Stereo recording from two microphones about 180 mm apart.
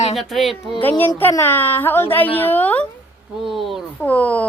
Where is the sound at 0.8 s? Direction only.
10° left (ahead or behind).